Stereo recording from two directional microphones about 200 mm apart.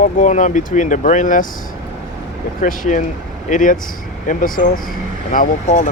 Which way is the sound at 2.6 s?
40° left (ahead or behind).